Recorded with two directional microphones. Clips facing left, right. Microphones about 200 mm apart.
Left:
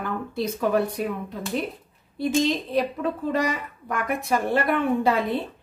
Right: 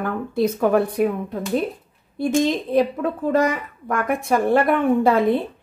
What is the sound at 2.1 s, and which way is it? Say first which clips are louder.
A woman's voice: right 3 dB; 50° right (ahead or behind).